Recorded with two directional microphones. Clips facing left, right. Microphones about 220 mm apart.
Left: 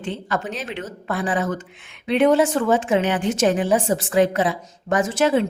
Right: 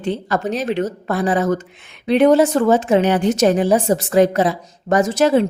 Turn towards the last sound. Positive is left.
turn(degrees=-40)  # may be behind; listen again after turning